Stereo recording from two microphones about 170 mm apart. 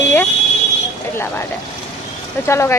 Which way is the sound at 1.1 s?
15° left (ahead or behind).